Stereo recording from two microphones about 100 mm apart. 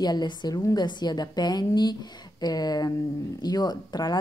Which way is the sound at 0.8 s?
45° left (ahead or behind).